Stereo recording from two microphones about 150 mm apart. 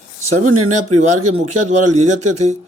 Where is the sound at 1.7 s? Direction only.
50° right (ahead or behind).